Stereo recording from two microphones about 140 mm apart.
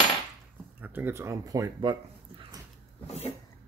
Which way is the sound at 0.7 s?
15° right (ahead or behind).